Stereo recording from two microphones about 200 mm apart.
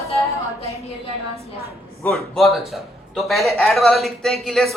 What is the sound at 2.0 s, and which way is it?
A man's voice, centre (ahead or behind).